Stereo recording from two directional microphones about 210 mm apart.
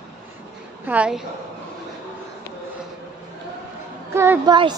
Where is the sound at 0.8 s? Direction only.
5° right (ahead or behind).